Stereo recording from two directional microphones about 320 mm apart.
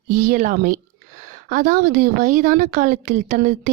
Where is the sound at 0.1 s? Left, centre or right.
Right.